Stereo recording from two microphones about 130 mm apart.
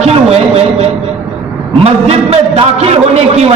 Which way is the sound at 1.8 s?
50° right (ahead or behind).